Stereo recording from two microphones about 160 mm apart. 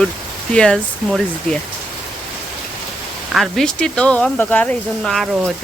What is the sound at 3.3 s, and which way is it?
Speech, centre (ahead or behind).